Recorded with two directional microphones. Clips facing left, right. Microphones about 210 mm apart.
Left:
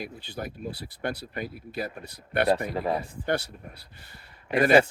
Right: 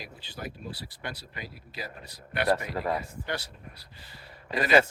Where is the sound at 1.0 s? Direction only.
55° left (ahead or behind).